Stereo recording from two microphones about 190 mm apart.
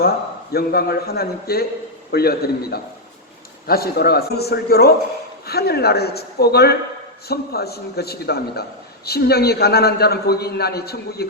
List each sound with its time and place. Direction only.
0.5 s a man's voice: 55° left (ahead or behind)